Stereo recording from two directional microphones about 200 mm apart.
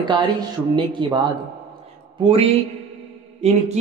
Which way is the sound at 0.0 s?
20° right (ahead or behind).